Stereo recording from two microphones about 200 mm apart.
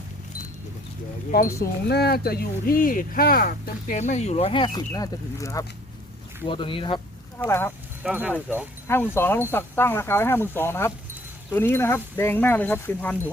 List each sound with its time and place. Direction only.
1.3 s speech: 50° left (ahead or behind); by 7.0 s 25° left (ahead or behind)
7.3 s speech: 10° left (ahead or behind)
8.0 s speech: 5° right (ahead or behind)
8.9 s speech: 10° left (ahead or behind)